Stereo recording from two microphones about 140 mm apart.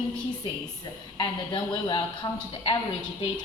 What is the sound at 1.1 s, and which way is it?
Speech, 30° left (ahead or behind).